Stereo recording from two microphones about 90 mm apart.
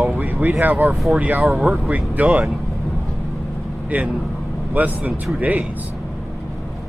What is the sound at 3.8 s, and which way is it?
A man's voice, 20° right (ahead or behind).